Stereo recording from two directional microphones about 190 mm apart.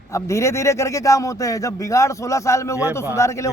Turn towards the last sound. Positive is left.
turn(degrees=15)  # may be behind; listen again after turning